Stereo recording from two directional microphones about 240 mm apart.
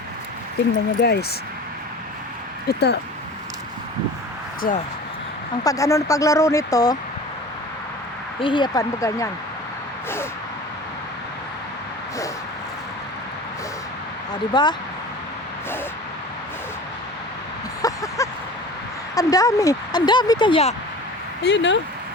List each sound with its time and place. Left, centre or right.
0.9 s speech: left
2.6 s speech: left
4.6 s speech: left
5.6 s speech: centre
8.4 s speech: centre
14.5 s speech: centre
17.8 s a sound: centre
19.1 s speech: centre
21.4 s speech: left